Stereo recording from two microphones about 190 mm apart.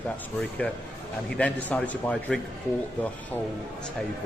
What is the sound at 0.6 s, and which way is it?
A man's voice, 5° left (ahead or behind).